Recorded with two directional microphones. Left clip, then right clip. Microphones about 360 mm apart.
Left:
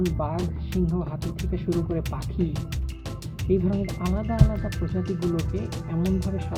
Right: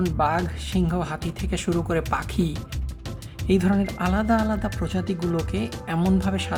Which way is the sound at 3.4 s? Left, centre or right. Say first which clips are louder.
Right 2 dB; centre.